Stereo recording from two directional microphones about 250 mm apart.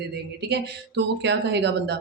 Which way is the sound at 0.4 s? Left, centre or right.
Right.